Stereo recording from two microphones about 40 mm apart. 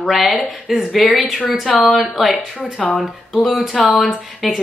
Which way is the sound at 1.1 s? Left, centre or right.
Centre.